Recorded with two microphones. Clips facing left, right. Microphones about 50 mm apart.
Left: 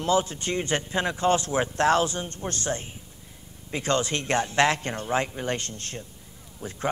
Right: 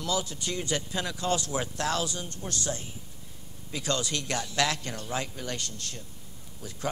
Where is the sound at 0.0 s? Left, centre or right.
Left.